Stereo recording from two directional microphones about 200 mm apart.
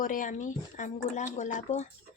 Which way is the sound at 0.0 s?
40° left (ahead or behind).